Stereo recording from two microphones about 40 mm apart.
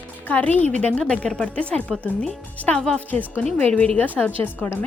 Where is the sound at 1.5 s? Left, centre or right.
Left.